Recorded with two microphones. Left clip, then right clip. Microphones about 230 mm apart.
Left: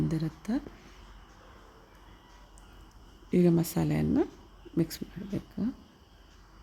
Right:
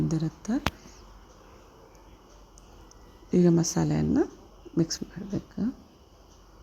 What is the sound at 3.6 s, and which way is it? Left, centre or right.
Speech, centre.